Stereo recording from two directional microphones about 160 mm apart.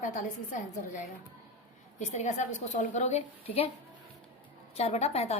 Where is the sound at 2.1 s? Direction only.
45° left (ahead or behind).